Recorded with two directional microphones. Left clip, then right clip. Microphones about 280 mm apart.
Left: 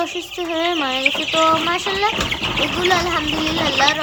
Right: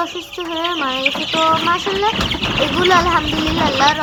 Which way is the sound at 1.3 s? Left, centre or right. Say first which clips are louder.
Right 2 dB; centre.